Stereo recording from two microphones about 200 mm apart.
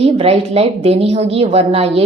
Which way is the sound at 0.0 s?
30° right (ahead or behind).